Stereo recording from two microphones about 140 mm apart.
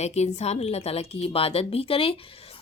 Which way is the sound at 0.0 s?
50° left (ahead or behind).